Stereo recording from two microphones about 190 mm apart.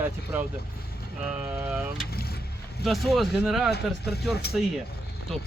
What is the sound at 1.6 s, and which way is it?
Speech, 5° right (ahead or behind).